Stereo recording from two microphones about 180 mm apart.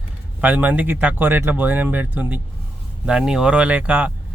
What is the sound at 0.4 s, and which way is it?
Speech, 10° right (ahead or behind).